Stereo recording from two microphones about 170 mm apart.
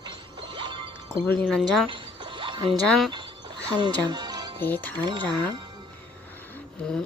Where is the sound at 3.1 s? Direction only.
25° right (ahead or behind).